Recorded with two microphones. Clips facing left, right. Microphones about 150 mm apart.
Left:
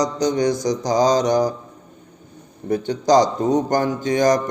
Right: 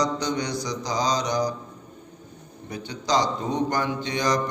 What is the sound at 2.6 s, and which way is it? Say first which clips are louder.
Mantra: left 10 dB; 50° left (ahead or behind).